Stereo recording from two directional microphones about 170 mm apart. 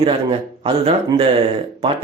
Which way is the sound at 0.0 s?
35° right (ahead or behind).